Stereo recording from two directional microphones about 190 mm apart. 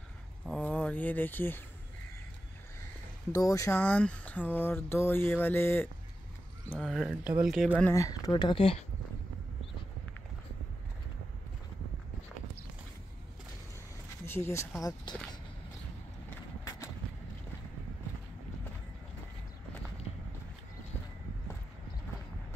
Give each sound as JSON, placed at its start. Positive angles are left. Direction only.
{"t": 0.5, "sound": "speech", "side_deg": 5}
{"t": 3.3, "sound": "speech", "side_deg": 15}
{"t": 6.7, "sound": "speech", "side_deg": 0}
{"t": 7.9, "sound": "speech", "side_deg": 20}
{"t": 14.2, "sound": "speech", "side_deg": 15}